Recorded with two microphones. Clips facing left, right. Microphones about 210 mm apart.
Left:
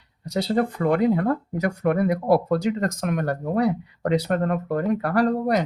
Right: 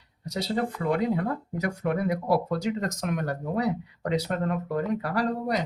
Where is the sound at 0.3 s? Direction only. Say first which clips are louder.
Left 6 dB; 55° left (ahead or behind).